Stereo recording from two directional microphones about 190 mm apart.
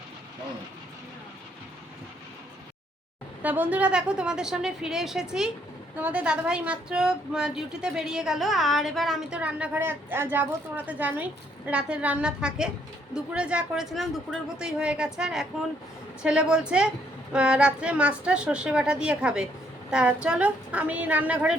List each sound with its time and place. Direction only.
3.4 s a woman's voice: 10° right (ahead or behind)